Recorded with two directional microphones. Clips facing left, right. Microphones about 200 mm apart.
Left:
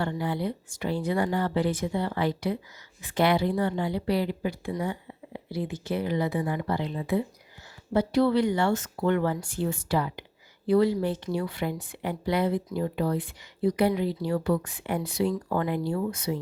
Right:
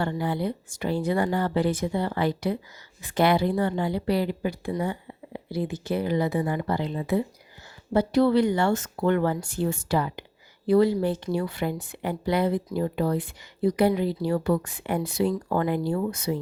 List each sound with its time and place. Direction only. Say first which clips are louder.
0.0 s a woman's voice: right 2 dB; 45° right (ahead or behind)